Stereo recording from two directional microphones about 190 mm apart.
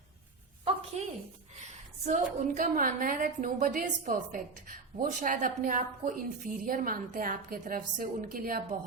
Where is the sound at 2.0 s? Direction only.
40° right (ahead or behind).